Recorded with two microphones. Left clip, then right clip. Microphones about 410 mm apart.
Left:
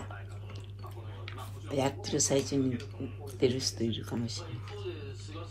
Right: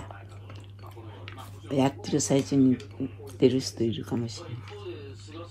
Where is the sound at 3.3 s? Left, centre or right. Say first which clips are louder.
Right 6 dB; right.